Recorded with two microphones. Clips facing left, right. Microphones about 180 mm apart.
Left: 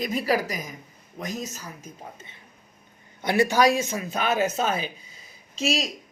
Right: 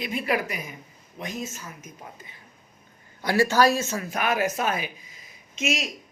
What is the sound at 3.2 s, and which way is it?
A man's voice, 20° left (ahead or behind).